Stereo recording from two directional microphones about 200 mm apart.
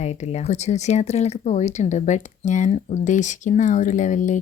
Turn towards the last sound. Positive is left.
turn(degrees=40)  # may be behind; listen again after turning